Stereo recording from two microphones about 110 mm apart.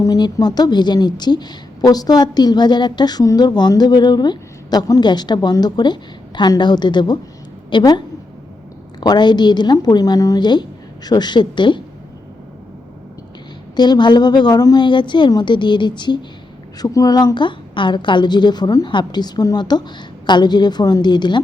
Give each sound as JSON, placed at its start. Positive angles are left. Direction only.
{"t": 0.0, "sound": "a woman's voice", "side_deg": 35}
{"t": 13.7, "sound": "a woman's voice", "side_deg": 40}